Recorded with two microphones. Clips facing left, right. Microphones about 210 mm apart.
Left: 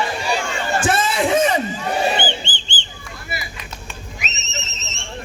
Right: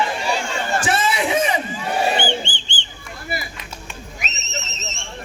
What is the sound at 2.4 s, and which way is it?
Bird, 55° right (ahead or behind).